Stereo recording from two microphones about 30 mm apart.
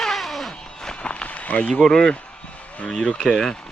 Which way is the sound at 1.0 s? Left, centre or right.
Left.